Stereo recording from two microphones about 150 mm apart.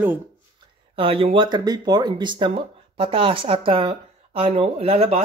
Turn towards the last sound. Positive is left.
turn(degrees=-40)  # may be behind; listen again after turning